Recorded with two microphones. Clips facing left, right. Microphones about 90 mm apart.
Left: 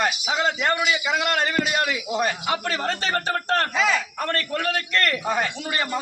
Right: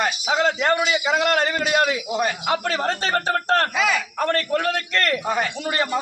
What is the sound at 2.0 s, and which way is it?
Speech, 5° right (ahead or behind).